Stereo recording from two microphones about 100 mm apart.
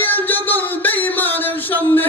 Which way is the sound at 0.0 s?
20° left (ahead or behind).